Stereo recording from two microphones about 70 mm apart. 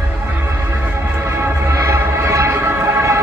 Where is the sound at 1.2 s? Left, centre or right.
Right.